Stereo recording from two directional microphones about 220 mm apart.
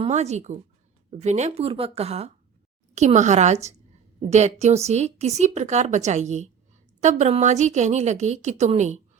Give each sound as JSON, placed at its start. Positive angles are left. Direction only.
{"t": 0.0, "sound": "a woman's voice", "side_deg": -30}